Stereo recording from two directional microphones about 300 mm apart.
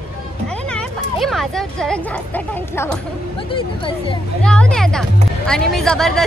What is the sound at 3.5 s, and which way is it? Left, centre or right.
Speech, centre.